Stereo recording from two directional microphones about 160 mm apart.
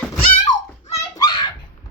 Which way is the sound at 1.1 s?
25° left (ahead or behind).